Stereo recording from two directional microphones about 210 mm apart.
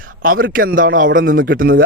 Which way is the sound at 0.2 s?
40° right (ahead or behind).